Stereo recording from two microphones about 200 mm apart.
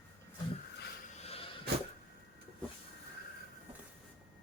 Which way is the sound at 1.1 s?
30° left (ahead or behind).